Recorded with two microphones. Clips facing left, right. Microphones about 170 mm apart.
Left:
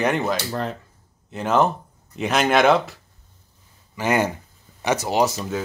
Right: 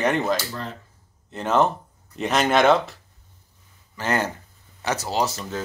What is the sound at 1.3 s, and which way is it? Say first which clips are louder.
Speech: left 1 dB; 5° left (ahead or behind).